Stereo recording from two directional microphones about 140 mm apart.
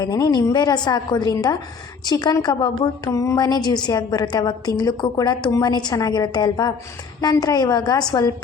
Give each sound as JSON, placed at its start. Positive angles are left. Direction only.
{"t": 0.0, "sound": "a woman's voice", "side_deg": 25}